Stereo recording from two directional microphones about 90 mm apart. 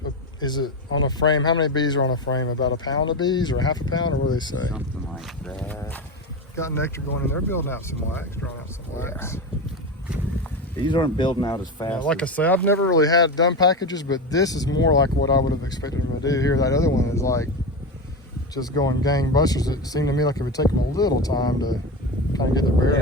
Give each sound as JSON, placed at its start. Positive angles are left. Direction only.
{"t": 0.3, "sound": "speech", "side_deg": 50}
{"t": 5.5, "sound": "speech", "side_deg": 15}
{"t": 6.6, "sound": "speech", "side_deg": 30}
{"t": 10.8, "sound": "speech", "side_deg": 60}
{"t": 12.0, "sound": "speech", "side_deg": 15}
{"t": 13.0, "sound": "speech", "side_deg": 45}
{"t": 18.5, "sound": "speech", "side_deg": 45}